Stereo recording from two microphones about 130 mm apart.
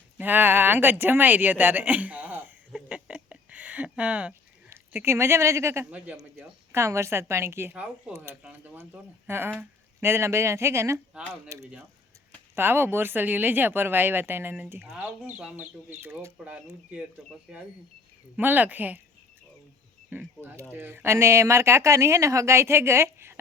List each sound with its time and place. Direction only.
0.2 s a sound: 15° right (ahead or behind)
4.7 s speech: 20° right (ahead or behind)
20.1 s speech: 15° right (ahead or behind)